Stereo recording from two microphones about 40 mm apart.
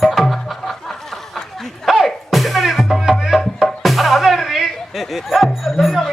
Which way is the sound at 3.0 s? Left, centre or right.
Centre.